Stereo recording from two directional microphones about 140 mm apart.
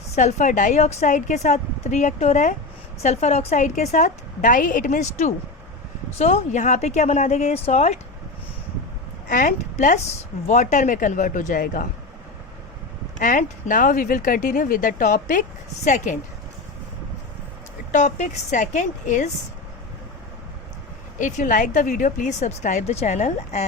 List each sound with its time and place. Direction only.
0.1 s a woman's voice: 55° left (ahead or behind)
9.3 s speech: 70° left (ahead or behind)
13.1 s speech: 70° left (ahead or behind)
17.9 s speech: 60° left (ahead or behind)
21.2 s speech: 65° left (ahead or behind)